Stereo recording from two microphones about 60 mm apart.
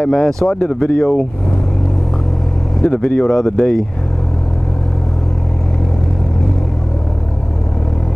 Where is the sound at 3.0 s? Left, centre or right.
Centre.